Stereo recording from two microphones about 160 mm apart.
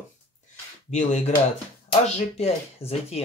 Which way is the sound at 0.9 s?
45° left (ahead or behind).